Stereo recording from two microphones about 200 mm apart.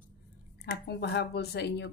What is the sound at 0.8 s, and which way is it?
A woman's voice, 55° left (ahead or behind).